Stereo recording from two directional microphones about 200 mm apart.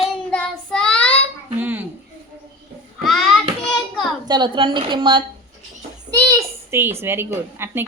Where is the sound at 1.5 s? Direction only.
10° right (ahead or behind).